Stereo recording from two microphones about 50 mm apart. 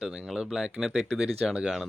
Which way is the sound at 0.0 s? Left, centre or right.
Centre.